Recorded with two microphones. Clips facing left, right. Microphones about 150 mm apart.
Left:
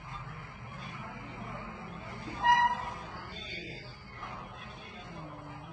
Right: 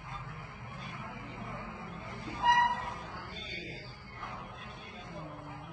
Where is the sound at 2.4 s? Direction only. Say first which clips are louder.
Left 1 dB; centre (ahead or behind).